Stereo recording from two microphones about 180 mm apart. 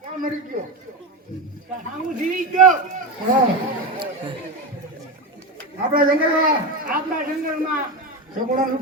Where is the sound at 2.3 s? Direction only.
45° right (ahead or behind).